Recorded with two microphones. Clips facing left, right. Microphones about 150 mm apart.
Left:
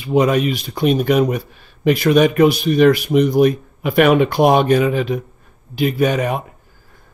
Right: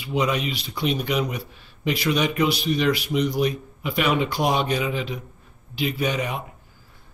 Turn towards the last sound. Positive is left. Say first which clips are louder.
# left 8 dB
turn(degrees=50)  # may be behind; listen again after turning